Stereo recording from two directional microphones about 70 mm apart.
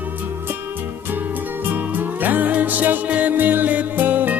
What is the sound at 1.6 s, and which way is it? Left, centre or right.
Music, right.